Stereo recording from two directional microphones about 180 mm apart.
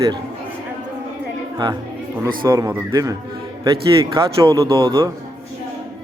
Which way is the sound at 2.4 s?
15° right (ahead or behind).